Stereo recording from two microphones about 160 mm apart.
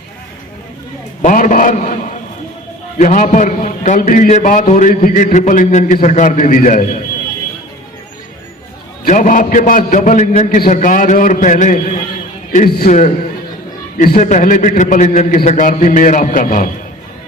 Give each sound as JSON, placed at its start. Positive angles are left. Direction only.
{"t": 1.2, "sound": "a man's voice", "side_deg": 55}
{"t": 9.0, "sound": "a man's voice", "side_deg": 55}
{"t": 12.5, "sound": "a man's voice", "side_deg": 60}
{"t": 14.2, "sound": "a man's voice", "side_deg": 50}